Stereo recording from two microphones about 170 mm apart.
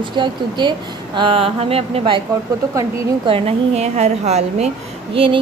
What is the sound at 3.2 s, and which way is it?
A woman's voice, 35° right (ahead or behind).